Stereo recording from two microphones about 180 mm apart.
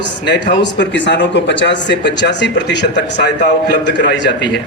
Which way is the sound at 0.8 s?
80° left.